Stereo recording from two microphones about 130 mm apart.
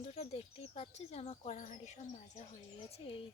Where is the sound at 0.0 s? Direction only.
55° left (ahead or behind).